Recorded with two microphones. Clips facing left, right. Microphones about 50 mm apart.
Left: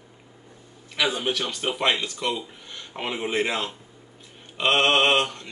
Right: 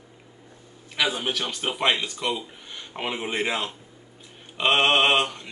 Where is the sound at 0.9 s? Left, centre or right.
Centre.